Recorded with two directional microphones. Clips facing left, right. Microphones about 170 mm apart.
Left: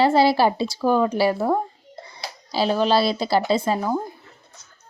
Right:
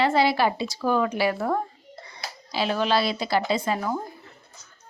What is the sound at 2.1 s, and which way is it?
Speech, 35° left (ahead or behind).